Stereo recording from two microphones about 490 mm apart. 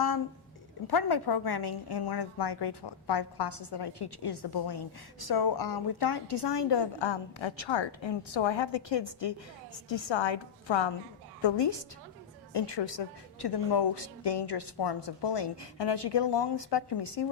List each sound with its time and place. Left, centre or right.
0.9 s a woman's voice: left